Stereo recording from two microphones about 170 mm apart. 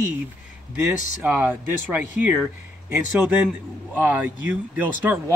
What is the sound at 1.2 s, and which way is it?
Speech, 10° right (ahead or behind).